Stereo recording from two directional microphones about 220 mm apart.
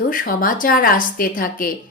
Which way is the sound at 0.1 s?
40° left (ahead or behind).